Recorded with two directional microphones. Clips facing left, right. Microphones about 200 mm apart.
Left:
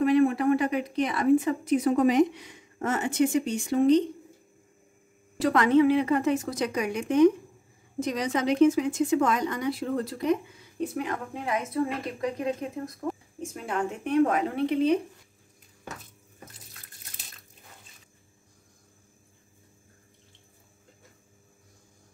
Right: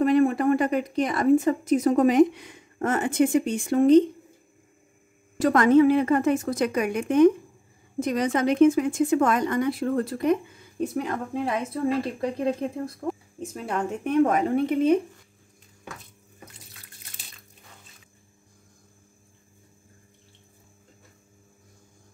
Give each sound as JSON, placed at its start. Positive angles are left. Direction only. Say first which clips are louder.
{"t": 0.0, "sound": "a woman's voice", "louder": "right 2 dB", "side_deg": -45}
{"t": 5.4, "sound": "a woman's voice", "louder": "right 3 dB", "side_deg": -45}
{"t": 10.8, "sound": "a woman's voice", "louder": "right 3 dB", "side_deg": -40}
{"t": 13.7, "sound": "a woman's voice", "louder": "right 2 dB", "side_deg": -40}